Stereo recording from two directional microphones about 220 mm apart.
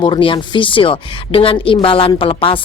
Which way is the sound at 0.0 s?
20° left (ahead or behind).